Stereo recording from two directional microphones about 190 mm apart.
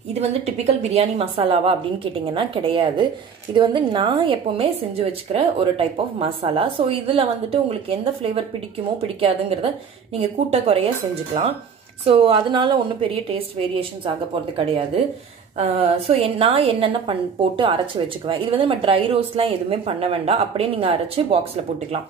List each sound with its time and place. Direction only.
0.1 s a woman's voice: 35° right (ahead or behind)
12.0 s a woman's voice: 30° right (ahead or behind)
15.5 s a woman's voice: 35° right (ahead or behind)